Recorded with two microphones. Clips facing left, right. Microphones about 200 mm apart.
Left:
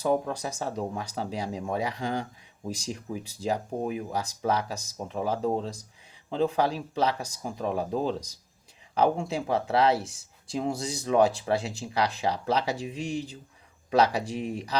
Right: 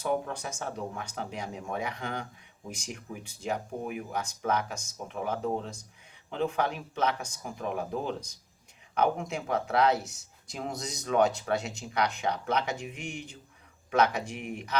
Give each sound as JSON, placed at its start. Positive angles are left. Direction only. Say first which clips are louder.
{"t": 0.0, "sound": "speech", "louder": "left 4 dB", "side_deg": 35}